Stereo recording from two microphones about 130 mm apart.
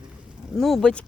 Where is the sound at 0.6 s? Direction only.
Centre (ahead or behind).